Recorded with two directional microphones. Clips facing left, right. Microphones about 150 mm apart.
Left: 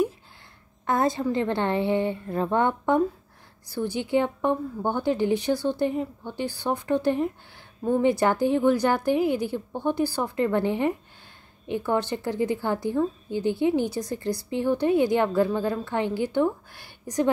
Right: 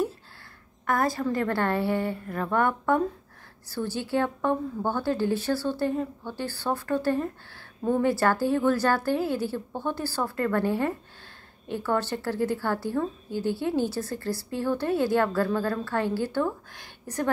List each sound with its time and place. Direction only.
0.8 s a woman's voice: 20° left (ahead or behind)